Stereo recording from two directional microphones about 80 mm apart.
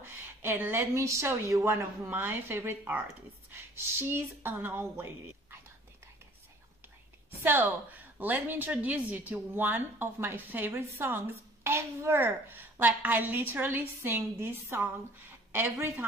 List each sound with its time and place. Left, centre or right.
0.4 s speech: right
7.2 s a woman's voice: right